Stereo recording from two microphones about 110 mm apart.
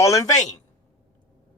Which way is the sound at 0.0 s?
30° left (ahead or behind).